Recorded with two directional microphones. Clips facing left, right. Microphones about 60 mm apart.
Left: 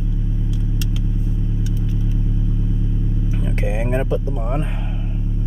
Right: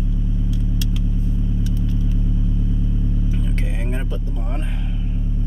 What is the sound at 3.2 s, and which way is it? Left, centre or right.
Vehicle, centre.